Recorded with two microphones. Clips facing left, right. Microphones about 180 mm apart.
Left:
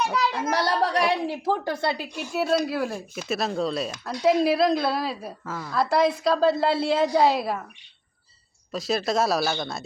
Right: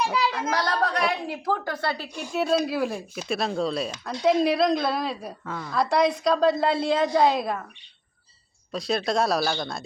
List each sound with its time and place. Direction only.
0.0 s a sound: centre (ahead or behind)
0.5 s speech: 25° left (ahead or behind)
2.3 s a woman's voice: centre (ahead or behind)
8.7 s a woman's voice: centre (ahead or behind)